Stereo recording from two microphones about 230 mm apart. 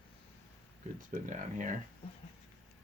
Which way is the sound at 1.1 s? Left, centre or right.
Right.